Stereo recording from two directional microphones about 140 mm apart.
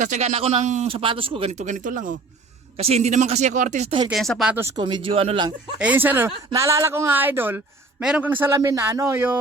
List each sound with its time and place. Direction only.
0.0 s speech: 60° right (ahead or behind)
0.9 s speech: 40° right (ahead or behind); by 2.1 s 70° right (ahead or behind)
2.7 s speech: 45° right (ahead or behind)
4.1 s speech: centre (ahead or behind)
4.8 s speech: 35° right (ahead or behind)
5.8 s speech: 10° right (ahead or behind)